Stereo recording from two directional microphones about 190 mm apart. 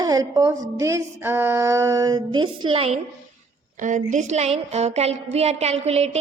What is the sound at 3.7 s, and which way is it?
A woman's voice, 40° right (ahead or behind).